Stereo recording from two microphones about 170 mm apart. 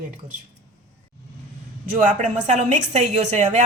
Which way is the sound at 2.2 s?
45° right (ahead or behind).